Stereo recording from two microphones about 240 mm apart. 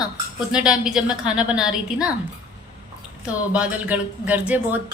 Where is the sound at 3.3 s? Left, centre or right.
Centre.